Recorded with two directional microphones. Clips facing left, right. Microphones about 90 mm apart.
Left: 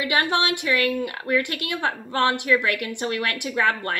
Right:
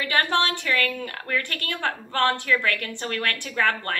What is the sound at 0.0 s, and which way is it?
A woman's voice, 15° left (ahead or behind).